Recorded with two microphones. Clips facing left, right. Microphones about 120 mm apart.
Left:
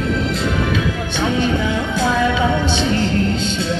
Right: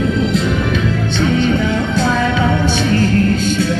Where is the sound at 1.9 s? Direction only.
15° left (ahead or behind).